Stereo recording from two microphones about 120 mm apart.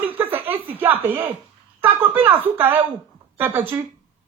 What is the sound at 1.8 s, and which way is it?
Speech, 15° right (ahead or behind).